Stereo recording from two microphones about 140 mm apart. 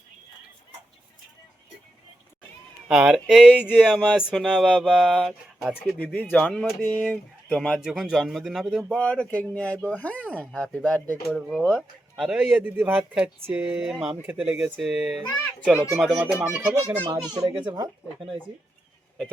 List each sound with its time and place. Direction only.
2.8 s speech: 5° right (ahead or behind)
6.1 s speech: 5° left (ahead or behind)
8.9 s speech: 10° left (ahead or behind)
11.3 s speech: centre (ahead or behind)
15.7 s speech: 15° right (ahead or behind)
16.0 s speech: centre (ahead or behind)
17.3 s speech: 25° right (ahead or behind)